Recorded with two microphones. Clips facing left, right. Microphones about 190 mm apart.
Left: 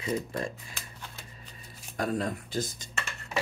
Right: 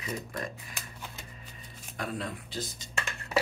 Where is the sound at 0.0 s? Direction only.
30° left (ahead or behind).